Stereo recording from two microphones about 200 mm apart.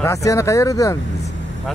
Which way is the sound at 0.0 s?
15° left (ahead or behind).